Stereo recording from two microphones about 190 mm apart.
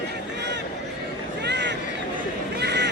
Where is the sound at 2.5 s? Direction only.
60° right (ahead or behind).